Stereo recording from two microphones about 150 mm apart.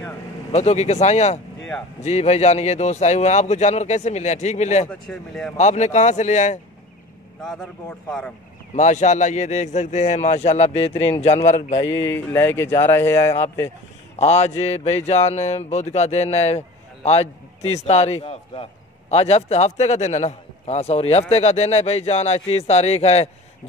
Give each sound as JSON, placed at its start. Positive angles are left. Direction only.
{"t": 0.5, "sound": "a man's voice", "side_deg": 50}
{"t": 4.8, "sound": "speech", "side_deg": 5}
{"t": 5.6, "sound": "a man's voice", "side_deg": 50}
{"t": 8.7, "sound": "a man's voice", "side_deg": 50}
{"t": 12.0, "sound": "speech", "side_deg": 15}
{"t": 14.1, "sound": "a man's voice", "side_deg": 45}